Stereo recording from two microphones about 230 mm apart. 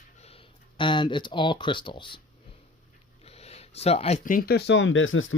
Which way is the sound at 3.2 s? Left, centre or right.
Left.